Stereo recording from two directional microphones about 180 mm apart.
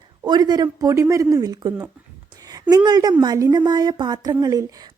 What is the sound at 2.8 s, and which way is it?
A woman's voice, 20° right (ahead or behind).